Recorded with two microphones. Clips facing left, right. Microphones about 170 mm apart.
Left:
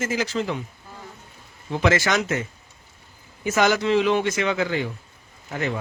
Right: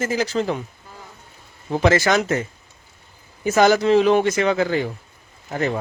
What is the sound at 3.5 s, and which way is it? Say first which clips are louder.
A man's voice: right 5 dB; 35° right (ahead or behind).